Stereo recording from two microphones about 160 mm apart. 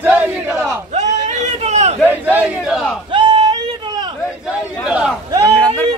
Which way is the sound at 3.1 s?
30° right (ahead or behind).